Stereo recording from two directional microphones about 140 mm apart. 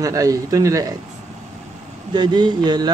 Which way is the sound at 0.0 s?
25° right (ahead or behind).